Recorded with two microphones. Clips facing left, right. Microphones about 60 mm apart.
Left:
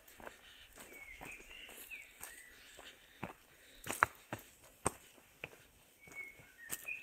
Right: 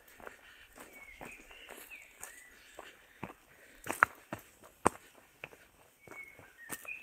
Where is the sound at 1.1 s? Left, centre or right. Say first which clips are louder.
Right 3 dB; centre.